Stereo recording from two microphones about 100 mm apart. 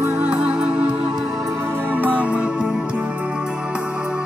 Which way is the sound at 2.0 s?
15° right (ahead or behind).